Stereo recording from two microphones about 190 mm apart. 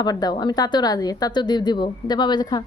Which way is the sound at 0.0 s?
20° left (ahead or behind).